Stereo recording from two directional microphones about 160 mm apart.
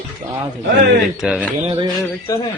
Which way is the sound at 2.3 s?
20° left (ahead or behind).